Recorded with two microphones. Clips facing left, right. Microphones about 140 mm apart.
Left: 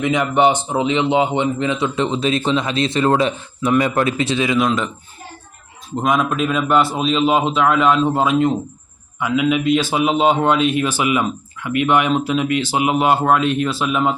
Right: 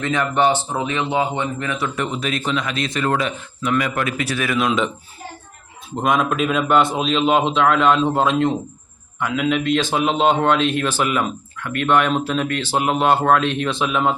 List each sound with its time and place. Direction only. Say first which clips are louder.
0.0 s a man's voice: left 3 dB; 15° left (ahead or behind)
4.6 s a man's voice: left 1 dB; centre (ahead or behind)
6.0 s a man's voice: left 1 dB; centre (ahead or behind)